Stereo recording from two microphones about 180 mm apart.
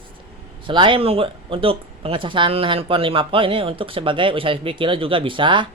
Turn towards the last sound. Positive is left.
turn(degrees=-25)  # may be behind; listen again after turning